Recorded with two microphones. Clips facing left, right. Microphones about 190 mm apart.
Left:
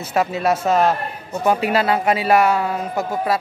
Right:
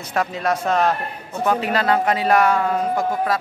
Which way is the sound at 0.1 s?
5° left (ahead or behind).